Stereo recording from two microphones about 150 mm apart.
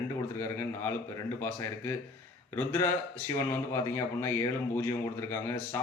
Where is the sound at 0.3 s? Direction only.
15° left (ahead or behind).